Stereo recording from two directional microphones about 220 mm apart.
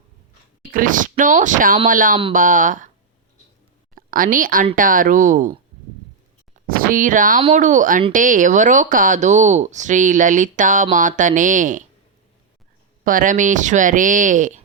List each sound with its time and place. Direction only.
0.7 s speech: 40° right (ahead or behind)
3.9 s speech: 40° right (ahead or behind)
6.7 s speech: 40° right (ahead or behind)
13.1 s speech: 40° right (ahead or behind)